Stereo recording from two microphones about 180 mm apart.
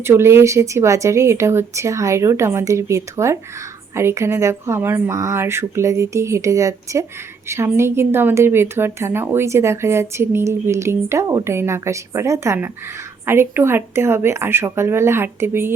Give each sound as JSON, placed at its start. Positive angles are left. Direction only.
{"t": 0.0, "sound": "a woman's voice", "side_deg": -15}